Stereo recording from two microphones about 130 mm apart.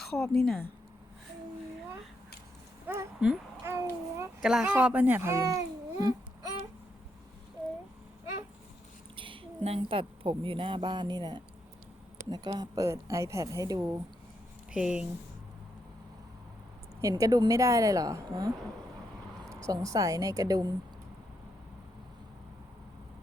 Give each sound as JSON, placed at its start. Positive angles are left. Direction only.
{"t": 0.0, "sound": "a woman's voice", "side_deg": 5}
{"t": 2.8, "sound": "a sound", "side_deg": -15}
{"t": 4.4, "sound": "speech", "side_deg": -5}
{"t": 9.1, "sound": "a sound", "side_deg": -40}
{"t": 9.6, "sound": "a woman's voice", "side_deg": -45}
{"t": 14.7, "sound": "speech", "side_deg": -5}
{"t": 17.0, "sound": "a woman's voice", "side_deg": -25}
{"t": 19.6, "sound": "a woman's voice", "side_deg": -25}